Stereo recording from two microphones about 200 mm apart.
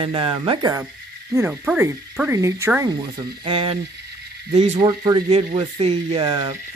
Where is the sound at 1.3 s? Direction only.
10° right (ahead or behind).